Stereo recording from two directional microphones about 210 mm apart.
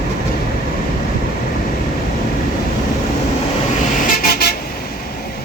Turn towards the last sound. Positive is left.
turn(degrees=45)  # may be behind; listen again after turning